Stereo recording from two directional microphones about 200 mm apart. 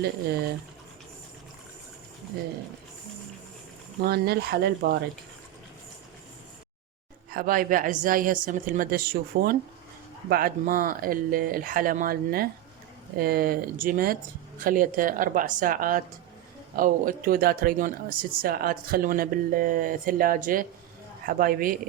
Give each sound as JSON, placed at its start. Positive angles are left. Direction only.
{"t": 4.0, "sound": "speech", "side_deg": -50}
{"t": 7.3, "sound": "speech", "side_deg": -45}